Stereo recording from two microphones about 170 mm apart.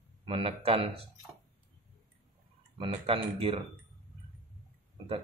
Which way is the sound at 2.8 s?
35° right (ahead or behind).